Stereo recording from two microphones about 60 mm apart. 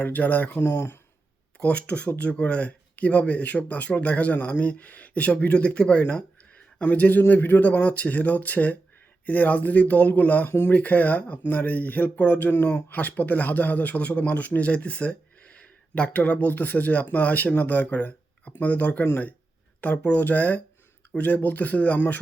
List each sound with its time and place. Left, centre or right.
0.0 s speech: left
0.7 s speech: left
1.5 s speech: centre
10.5 s speech: left
10.8 s speech: left